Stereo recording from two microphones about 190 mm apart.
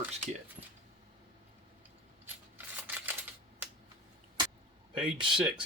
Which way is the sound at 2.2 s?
10° right (ahead or behind).